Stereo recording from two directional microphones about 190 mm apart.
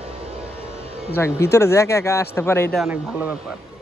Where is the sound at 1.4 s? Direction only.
15° left (ahead or behind).